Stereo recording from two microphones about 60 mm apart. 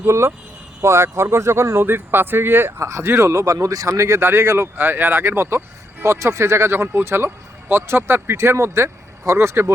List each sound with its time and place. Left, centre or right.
0.0 s speech: right
3.8 s speech: right
4.3 s speech: right